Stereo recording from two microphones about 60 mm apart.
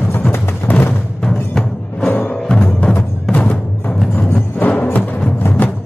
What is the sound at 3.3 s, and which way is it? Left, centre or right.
Music, left.